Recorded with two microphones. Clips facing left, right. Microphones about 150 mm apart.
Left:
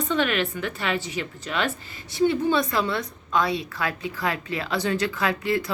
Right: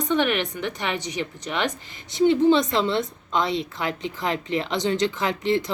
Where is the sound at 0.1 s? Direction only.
20° right (ahead or behind).